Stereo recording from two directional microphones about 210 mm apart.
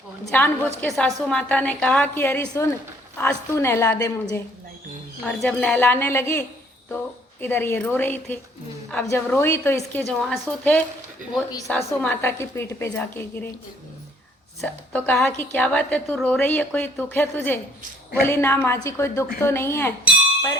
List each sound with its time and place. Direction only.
0.3 s a woman's voice: 5° left (ahead or behind)
7.4 s a woman's voice: 10° left (ahead or behind)
10.0 s a woman's voice: centre (ahead or behind)
11.9 s a woman's voice: 10° left (ahead or behind)
14.6 s a woman's voice: 5° left (ahead or behind)